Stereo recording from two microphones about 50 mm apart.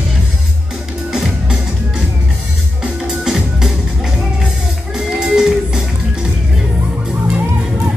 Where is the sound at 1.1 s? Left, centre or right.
Centre.